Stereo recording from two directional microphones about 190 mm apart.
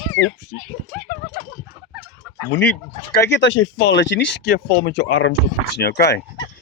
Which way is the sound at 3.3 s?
70° left (ahead or behind).